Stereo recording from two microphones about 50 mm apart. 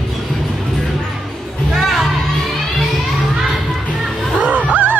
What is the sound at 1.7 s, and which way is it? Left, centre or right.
Music, centre.